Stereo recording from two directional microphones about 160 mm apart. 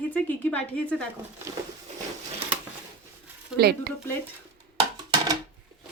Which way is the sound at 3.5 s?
90° right.